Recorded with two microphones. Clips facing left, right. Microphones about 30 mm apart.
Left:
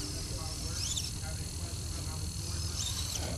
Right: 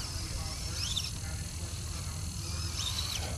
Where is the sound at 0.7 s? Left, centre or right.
Centre.